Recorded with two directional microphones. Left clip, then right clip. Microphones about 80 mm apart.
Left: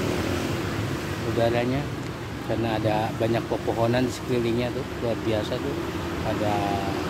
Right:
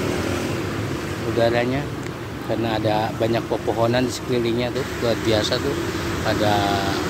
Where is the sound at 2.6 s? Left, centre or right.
Left.